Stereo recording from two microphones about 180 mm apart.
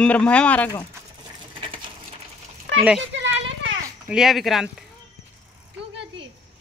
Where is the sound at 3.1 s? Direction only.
90° right.